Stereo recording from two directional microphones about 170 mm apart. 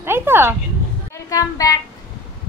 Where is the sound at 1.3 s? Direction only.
20° left (ahead or behind).